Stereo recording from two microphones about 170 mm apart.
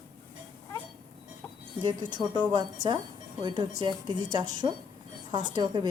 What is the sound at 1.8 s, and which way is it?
Speech, 25° right (ahead or behind).